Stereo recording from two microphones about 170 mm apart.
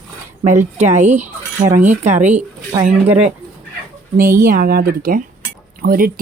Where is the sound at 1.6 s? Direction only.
15° right (ahead or behind).